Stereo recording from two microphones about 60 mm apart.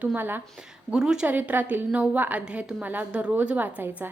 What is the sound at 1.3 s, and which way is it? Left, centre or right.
A woman's voice, right.